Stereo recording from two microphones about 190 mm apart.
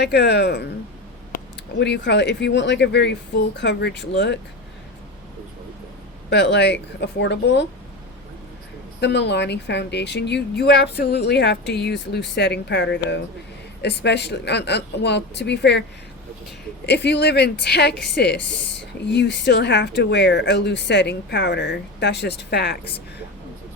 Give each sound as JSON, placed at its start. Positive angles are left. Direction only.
{"t": 0.0, "sound": "a woman's voice", "side_deg": 60}
{"t": 1.8, "sound": "a woman's voice", "side_deg": 65}
{"t": 6.3, "sound": "a woman's voice", "side_deg": 65}
{"t": 9.0, "sound": "a woman's voice", "side_deg": 65}
{"t": 16.8, "sound": "a woman's voice", "side_deg": 65}
{"t": 18.3, "sound": "speech", "side_deg": 5}
{"t": 18.7, "sound": "a woman's voice", "side_deg": 65}